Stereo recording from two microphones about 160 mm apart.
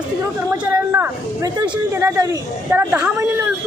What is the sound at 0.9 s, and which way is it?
A man's voice, 15° right (ahead or behind).